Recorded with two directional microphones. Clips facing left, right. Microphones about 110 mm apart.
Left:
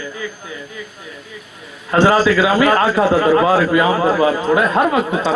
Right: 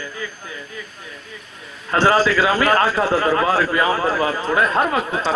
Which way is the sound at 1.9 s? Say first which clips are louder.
Left 3 dB; 15° left (ahead or behind).